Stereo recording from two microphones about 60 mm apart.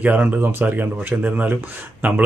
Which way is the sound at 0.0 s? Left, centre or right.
Right.